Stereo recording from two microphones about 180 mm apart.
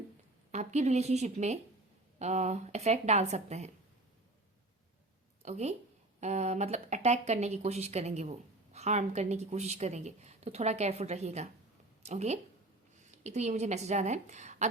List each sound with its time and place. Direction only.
0.5 s speech: 40° right (ahead or behind)
5.4 s a woman's voice: 40° right (ahead or behind)